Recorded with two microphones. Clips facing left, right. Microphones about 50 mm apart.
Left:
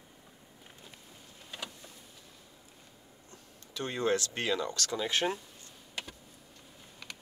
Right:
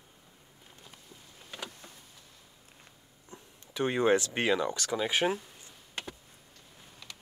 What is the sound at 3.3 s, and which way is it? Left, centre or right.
Speech, right.